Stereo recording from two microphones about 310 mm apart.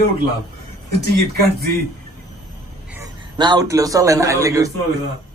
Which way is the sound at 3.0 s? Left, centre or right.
Centre.